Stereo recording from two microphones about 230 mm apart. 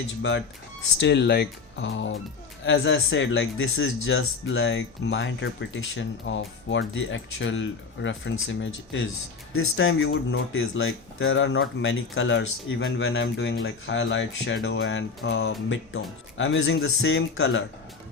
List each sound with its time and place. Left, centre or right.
0.2 s speech: left